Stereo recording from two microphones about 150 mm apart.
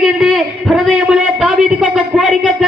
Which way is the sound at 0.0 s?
Centre (ahead or behind).